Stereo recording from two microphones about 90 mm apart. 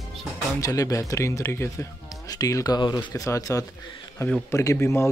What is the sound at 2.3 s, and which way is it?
Speech, 40° left (ahead or behind).